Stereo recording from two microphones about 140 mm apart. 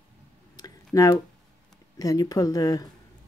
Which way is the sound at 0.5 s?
25° left (ahead or behind).